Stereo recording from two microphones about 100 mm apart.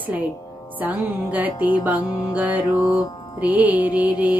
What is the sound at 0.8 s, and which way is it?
Mantra, 15° right (ahead or behind).